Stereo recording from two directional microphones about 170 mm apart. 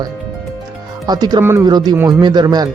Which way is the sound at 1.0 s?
25° right (ahead or behind).